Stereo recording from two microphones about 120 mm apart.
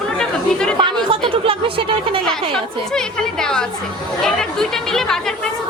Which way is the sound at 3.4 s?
5° left (ahead or behind).